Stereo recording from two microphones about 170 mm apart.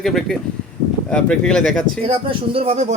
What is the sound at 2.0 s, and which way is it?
Speech, 35° right (ahead or behind).